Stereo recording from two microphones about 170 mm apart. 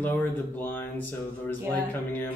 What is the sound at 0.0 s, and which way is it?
Speech, 10° left (ahead or behind).